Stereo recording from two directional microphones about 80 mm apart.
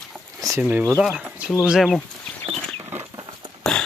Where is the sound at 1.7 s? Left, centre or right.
Centre.